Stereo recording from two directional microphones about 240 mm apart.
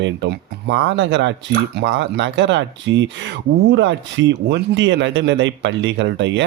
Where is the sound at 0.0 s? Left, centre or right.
Right.